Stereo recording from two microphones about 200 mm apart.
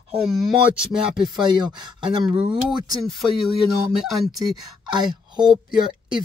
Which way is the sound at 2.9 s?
Centre (ahead or behind).